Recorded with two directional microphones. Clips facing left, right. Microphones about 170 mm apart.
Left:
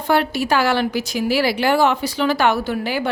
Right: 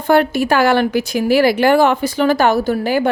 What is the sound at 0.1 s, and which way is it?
A woman's voice, 50° right (ahead or behind).